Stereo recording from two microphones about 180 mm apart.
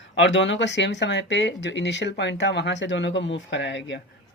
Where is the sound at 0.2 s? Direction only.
90° left.